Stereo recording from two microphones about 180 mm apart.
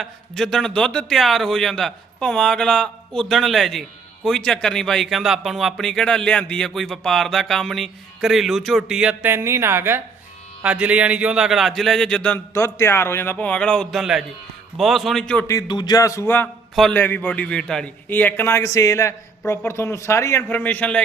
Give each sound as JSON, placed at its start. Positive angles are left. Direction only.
{"t": 0.0, "sound": "a man's voice", "side_deg": 0}
{"t": 15.4, "sound": "a man's voice", "side_deg": 20}